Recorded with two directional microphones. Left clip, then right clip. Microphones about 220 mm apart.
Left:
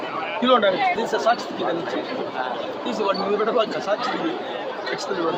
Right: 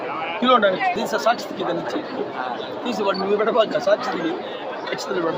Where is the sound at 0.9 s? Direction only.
45° right (ahead or behind).